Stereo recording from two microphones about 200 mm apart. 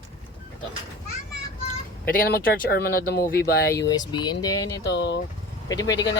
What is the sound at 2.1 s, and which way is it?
Speech, 45° left (ahead or behind).